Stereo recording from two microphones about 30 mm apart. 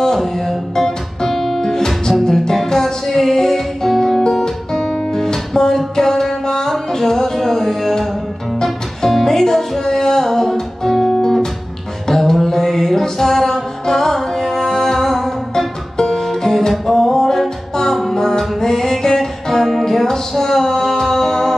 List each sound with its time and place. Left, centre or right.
0.0 s music: centre
4.0 s guitar: centre
5.9 s music: centre
12.1 s mantra: centre
12.9 s music: centre